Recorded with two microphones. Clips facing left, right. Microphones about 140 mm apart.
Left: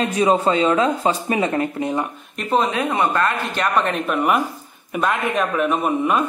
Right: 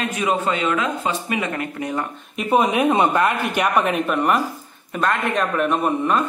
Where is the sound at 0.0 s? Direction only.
35° left (ahead or behind).